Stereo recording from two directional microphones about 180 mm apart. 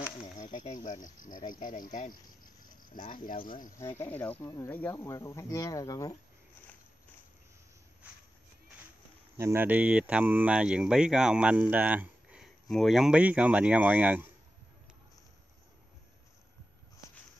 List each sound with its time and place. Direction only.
0.4 s speech: 45° left (ahead or behind)
3.7 s speech: 15° left (ahead or behind)
9.4 s speech: 15° right (ahead or behind)